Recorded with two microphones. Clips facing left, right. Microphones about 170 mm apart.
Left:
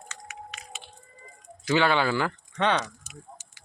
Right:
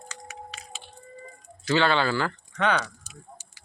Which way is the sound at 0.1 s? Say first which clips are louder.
Right 1 dB; 35° right (ahead or behind).